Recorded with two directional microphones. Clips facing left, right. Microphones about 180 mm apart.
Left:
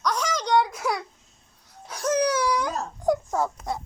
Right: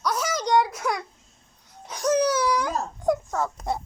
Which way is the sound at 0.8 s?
Centre (ahead or behind).